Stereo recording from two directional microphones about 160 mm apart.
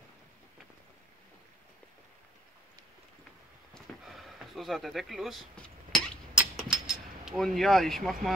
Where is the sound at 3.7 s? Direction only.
Centre (ahead or behind).